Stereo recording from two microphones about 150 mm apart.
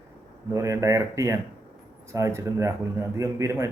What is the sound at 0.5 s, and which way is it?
Speech, 20° right (ahead or behind).